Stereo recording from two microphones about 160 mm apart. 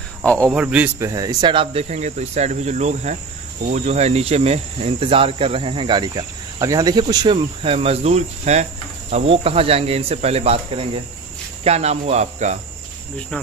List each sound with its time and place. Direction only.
0.2 s speech: 10° left (ahead or behind)
0.5 s cricket: 5° right (ahead or behind); by 10.6 s 40° right (ahead or behind)
11.6 s cricket: 40° right (ahead or behind)